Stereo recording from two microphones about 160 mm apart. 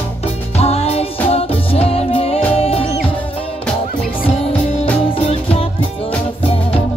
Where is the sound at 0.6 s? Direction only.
40° left (ahead or behind).